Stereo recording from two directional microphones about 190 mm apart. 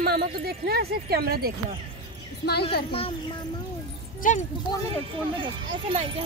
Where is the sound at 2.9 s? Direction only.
30° left (ahead or behind).